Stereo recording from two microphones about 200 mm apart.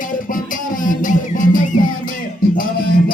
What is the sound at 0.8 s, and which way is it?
Music, 40° left (ahead or behind).